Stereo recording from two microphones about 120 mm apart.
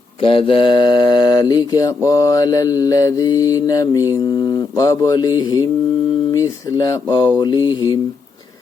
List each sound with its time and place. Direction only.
0.2 s mantra: 50° left (ahead or behind); by 5.6 s 35° left (ahead or behind)
6.3 s speech: 25° left (ahead or behind)
7.1 s mantra: 35° left (ahead or behind)